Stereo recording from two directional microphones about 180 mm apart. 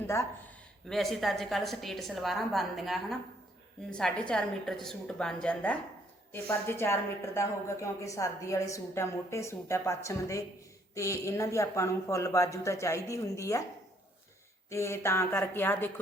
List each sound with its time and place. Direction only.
0.9 s a woman's voice: centre (ahead or behind); by 13.6 s 15° left (ahead or behind)
14.7 s a woman's voice: 15° left (ahead or behind)